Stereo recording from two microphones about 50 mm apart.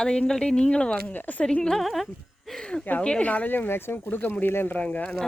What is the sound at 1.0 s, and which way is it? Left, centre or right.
Speech, left.